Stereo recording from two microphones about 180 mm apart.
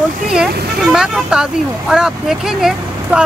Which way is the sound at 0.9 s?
5° right (ahead or behind).